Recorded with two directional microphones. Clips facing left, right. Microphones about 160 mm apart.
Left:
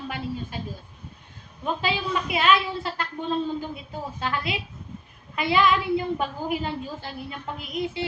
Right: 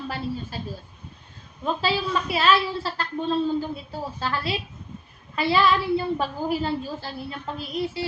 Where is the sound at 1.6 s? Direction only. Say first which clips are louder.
Right 2 dB; 15° left (ahead or behind).